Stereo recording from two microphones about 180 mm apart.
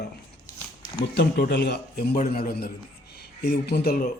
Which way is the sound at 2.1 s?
50° left (ahead or behind).